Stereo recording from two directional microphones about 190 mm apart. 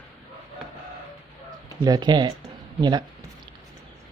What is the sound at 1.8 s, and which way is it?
Speech, 20° right (ahead or behind).